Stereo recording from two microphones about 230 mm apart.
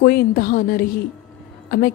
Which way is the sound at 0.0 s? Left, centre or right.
Left.